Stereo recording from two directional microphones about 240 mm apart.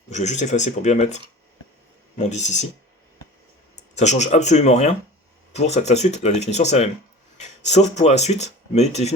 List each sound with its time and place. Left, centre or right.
0.1 s speech: left
3.9 s speech: left